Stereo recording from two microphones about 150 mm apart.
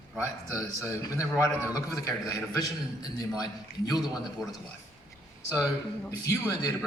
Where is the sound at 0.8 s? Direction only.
20° left (ahead or behind).